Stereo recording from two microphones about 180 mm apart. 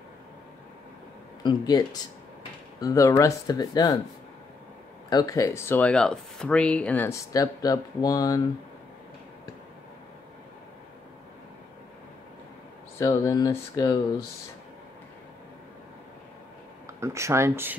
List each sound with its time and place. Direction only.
1.4 s speech: 25° left (ahead or behind)
5.1 s speech: 20° left (ahead or behind)
13.0 s speech: 20° left (ahead or behind)
16.8 s speech: 15° right (ahead or behind)